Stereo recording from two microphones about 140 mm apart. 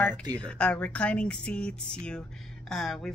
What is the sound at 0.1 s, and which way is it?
Speech, 30° right (ahead or behind).